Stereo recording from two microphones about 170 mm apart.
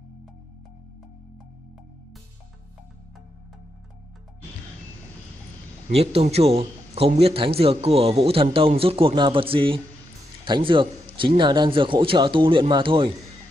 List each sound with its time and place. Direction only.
5.9 s a man's voice: 35° right (ahead or behind)